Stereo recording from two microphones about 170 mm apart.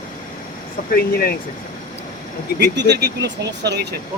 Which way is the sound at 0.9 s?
65° left (ahead or behind).